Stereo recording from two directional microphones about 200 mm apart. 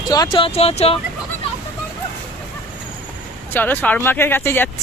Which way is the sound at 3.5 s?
10° left (ahead or behind).